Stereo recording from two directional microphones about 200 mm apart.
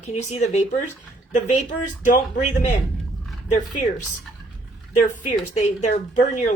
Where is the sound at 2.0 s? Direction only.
40° left (ahead or behind).